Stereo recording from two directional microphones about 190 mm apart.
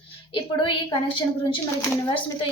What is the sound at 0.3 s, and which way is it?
Speech, 25° left (ahead or behind).